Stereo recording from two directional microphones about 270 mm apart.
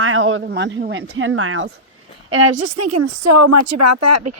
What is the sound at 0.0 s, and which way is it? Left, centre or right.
A woman's voice, right.